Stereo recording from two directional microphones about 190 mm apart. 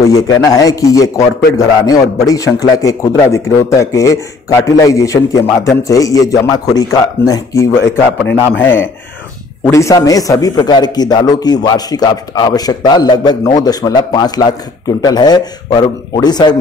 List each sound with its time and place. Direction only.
0.0 s a man's voice: 15° left (ahead or behind)